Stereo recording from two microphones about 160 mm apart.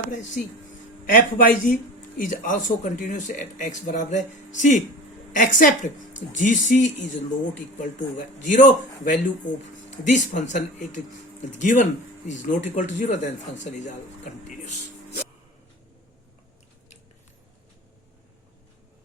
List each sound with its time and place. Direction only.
1.0 s a man's voice: 55° left (ahead or behind)